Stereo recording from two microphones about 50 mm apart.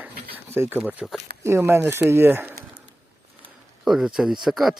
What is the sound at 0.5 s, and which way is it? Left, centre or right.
Speech, right.